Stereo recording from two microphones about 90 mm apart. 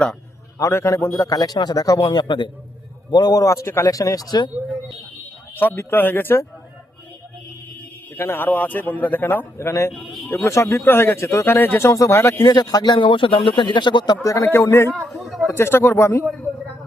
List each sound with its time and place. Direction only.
0.7 s a man's voice: 30° left (ahead or behind)
2.0 s a man's voice: 55° left (ahead or behind)
5.5 s a man's voice: 20° left (ahead or behind)
8.1 s a man's voice: 25° left (ahead or behind)
11.9 s a man's voice: 35° left (ahead or behind)
12.4 s a man's voice: 50° left (ahead or behind)
13.1 s speech: 75° left (ahead or behind); by 14.2 s 55° left (ahead or behind)
14.2 s a man's voice: 35° left (ahead or behind)
14.4 s a man's voice: 25° left (ahead or behind)
15.2 s a sound: centre (ahead or behind)
15.5 s a man's voice: 25° left (ahead or behind)